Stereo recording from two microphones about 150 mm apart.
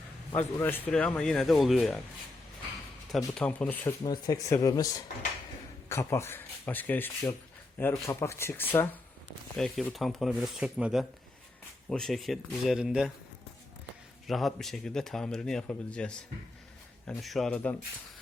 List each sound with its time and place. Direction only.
0.3 s a man's voice: 15° left (ahead or behind)
3.3 s speech: 10° left (ahead or behind)
4.0 s a man's voice: 25° left (ahead or behind); by 13.1 s 5° right (ahead or behind)
14.3 s a man's voice: centre (ahead or behind)